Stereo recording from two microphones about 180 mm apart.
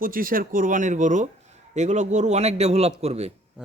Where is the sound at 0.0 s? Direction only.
50° right (ahead or behind); by 3.3 s 35° right (ahead or behind).